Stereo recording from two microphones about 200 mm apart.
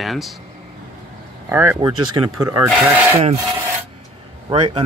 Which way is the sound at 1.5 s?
10° right (ahead or behind).